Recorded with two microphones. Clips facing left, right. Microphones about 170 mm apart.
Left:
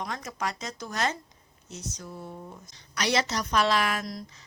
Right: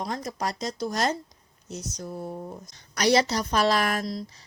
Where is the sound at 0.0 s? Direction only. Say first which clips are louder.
Right 3 dB; 35° right (ahead or behind).